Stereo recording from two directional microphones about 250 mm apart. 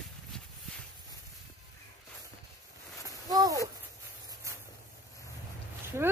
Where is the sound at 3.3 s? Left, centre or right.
Centre.